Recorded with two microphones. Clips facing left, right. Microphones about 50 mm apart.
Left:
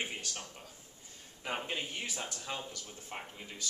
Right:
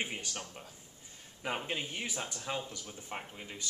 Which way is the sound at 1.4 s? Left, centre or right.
Centre.